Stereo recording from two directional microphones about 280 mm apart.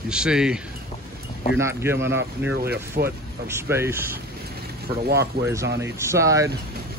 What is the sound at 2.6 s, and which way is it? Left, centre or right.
Speech, right.